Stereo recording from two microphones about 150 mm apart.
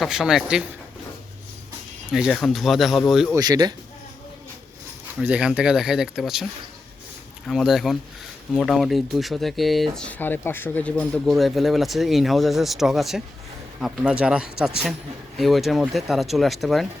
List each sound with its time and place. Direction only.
0.0 s speech: 5° right (ahead or behind)
2.1 s speech: centre (ahead or behind)
3.3 s speech: 25° right (ahead or behind)
5.2 s speech: 5° right (ahead or behind)